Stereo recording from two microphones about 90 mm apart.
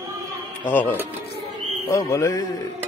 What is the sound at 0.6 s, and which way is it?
Speech, 20° left (ahead or behind).